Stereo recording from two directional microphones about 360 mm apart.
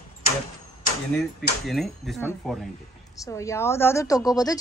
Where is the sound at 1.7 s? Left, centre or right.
Centre.